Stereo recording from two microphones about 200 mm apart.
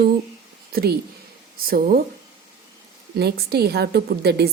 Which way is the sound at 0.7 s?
50° right (ahead or behind).